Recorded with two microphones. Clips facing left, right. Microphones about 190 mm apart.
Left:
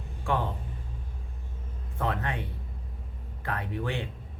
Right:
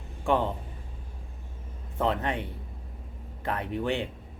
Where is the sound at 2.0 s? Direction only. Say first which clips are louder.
Right 4 dB; 20° right (ahead or behind).